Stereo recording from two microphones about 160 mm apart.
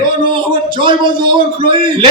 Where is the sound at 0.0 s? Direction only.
30° right (ahead or behind).